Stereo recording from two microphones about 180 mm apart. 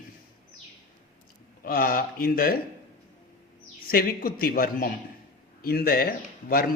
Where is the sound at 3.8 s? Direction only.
55° left (ahead or behind).